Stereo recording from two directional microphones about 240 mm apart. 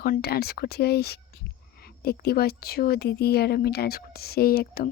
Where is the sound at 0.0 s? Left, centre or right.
Left.